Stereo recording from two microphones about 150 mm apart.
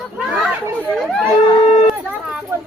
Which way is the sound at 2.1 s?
5° right (ahead or behind).